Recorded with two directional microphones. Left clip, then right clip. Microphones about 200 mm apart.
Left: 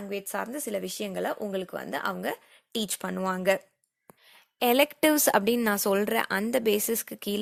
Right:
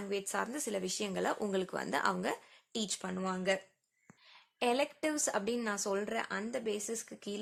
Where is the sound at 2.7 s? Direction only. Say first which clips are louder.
Left 7 dB; 35° left (ahead or behind).